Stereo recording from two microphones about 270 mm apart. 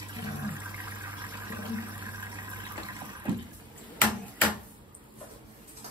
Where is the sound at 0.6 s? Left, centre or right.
Centre.